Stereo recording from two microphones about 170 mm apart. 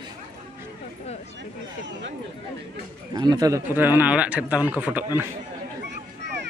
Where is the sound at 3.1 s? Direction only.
20° right (ahead or behind).